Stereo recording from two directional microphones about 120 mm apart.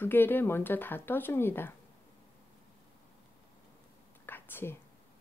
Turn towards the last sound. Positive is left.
turn(degrees=15)  # may be behind; listen again after turning